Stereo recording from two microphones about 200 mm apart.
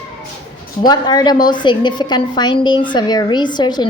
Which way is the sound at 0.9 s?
20° left (ahead or behind).